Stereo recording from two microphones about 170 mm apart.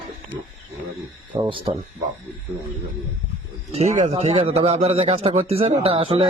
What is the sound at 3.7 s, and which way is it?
A man's voice, 40° right (ahead or behind).